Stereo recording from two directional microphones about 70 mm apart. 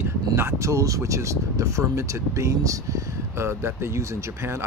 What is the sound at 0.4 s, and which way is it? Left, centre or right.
Speech, right.